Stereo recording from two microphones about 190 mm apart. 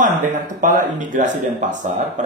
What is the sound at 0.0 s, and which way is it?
Speech, 40° right (ahead or behind).